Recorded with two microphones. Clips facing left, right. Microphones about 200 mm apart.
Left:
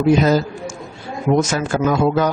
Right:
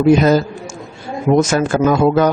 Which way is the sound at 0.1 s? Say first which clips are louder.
Right 3 dB; 55° right (ahead or behind).